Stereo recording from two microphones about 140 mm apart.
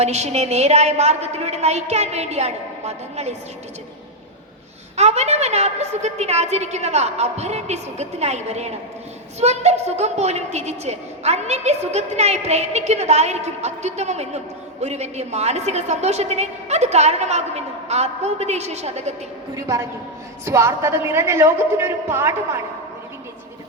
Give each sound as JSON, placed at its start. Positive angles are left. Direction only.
{"t": 0.0, "sound": "a woman's voice", "side_deg": -50}
{"t": 4.9, "sound": "a woman's voice", "side_deg": -50}
{"t": 19.5, "sound": "a woman's voice", "side_deg": -25}